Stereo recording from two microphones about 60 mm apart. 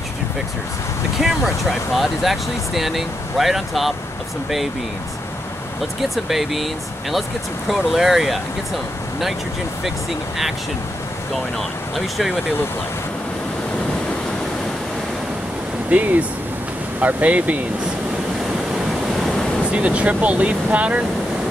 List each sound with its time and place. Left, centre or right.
1.2 s speech: centre
6.0 s speech: centre
11.9 s speech: centre
15.9 s speech: right
19.7 s speech: right